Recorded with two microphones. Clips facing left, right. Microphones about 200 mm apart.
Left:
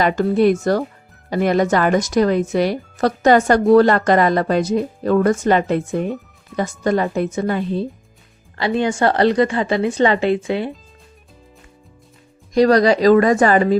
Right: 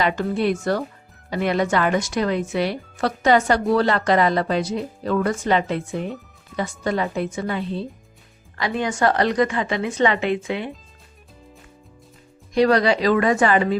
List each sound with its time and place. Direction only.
0.0 s a woman's voice: 45° left (ahead or behind)
8.5 s a woman's voice: 30° left (ahead or behind)
12.5 s a woman's voice: 40° left (ahead or behind)